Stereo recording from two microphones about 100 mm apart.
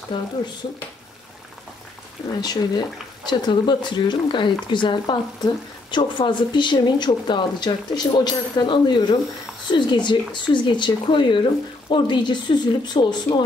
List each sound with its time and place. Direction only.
2.4 s speech: 40° left (ahead or behind)